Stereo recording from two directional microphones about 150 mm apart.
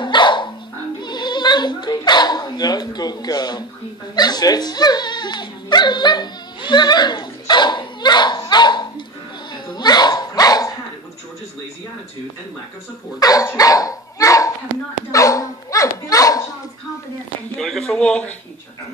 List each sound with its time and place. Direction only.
0.0 s dog: 30° left (ahead or behind)
1.0 s speech: 30° left (ahead or behind)
4.1 s dog: 25° left (ahead or behind)
13.2 s dog: 25° left (ahead or behind)
15.0 s a sound: 20° left (ahead or behind)
17.6 s speech: 5° left (ahead or behind)